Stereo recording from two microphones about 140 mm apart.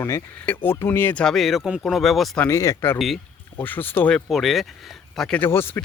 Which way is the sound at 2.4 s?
25° left (ahead or behind).